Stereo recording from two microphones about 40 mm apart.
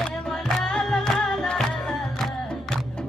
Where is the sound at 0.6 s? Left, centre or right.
Centre.